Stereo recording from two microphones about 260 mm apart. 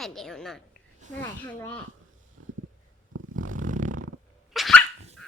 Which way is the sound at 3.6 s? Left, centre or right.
Right.